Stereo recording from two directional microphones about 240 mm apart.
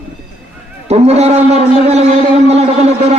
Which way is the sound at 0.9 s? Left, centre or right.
Right.